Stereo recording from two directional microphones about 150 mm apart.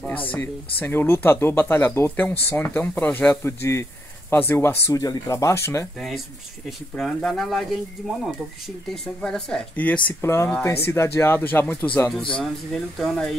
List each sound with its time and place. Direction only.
0.0 s a sound: 10° left (ahead or behind)
0.7 s speech: 15° left (ahead or behind)
5.9 s speech: centre (ahead or behind)
8.9 s speech: 5° left (ahead or behind)
10.2 s speech: 20° left (ahead or behind); by 13.4 s centre (ahead or behind)